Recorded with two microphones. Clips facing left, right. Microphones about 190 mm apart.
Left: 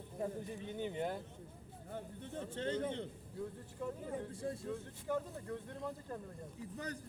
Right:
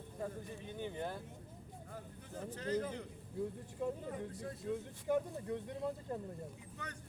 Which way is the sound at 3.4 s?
20° right (ahead or behind).